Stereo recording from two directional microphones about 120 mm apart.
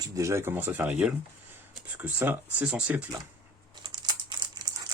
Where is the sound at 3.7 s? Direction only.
35° right (ahead or behind).